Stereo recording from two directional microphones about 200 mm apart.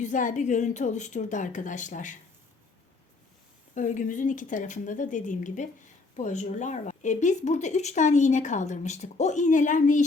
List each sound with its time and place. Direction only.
0.0 s speech: 40° left (ahead or behind)
3.8 s speech: 40° left (ahead or behind)